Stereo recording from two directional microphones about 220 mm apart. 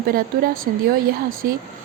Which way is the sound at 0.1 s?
40° right (ahead or behind).